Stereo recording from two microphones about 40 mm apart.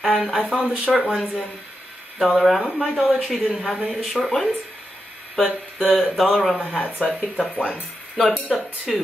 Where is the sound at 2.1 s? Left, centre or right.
Centre.